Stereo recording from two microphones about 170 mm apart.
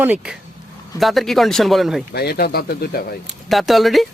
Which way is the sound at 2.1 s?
65° left (ahead or behind).